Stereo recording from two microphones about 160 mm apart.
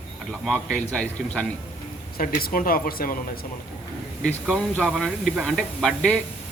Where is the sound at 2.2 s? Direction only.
65° left (ahead or behind).